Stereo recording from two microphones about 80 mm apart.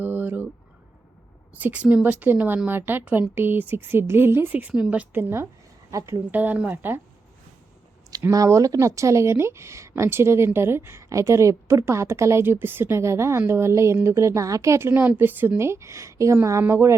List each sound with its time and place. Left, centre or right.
0.0 s a sound: right
1.5 s a woman's voice: centre
5.1 s speech: right
5.9 s a woman's voice: right
6.3 s a woman's voice: right
8.3 s speech: right